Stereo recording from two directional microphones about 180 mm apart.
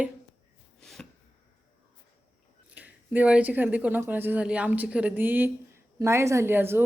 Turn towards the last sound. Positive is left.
turn(degrees=-15)  # may be behind; listen again after turning